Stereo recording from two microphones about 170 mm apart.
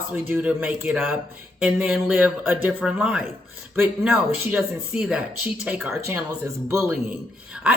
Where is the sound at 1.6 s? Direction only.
5° right (ahead or behind).